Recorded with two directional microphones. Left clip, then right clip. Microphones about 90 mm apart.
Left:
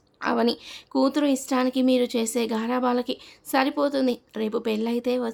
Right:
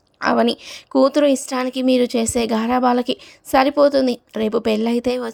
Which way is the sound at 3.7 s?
65° right (ahead or behind).